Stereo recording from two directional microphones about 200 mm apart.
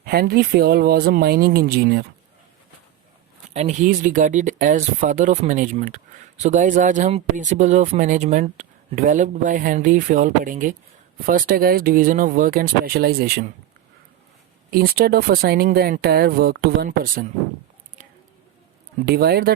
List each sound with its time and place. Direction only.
0.0 s speech: 50° right (ahead or behind)
3.5 s speech: 35° right (ahead or behind)
14.7 s speech: 50° right (ahead or behind)
19.0 s speech: 50° right (ahead or behind)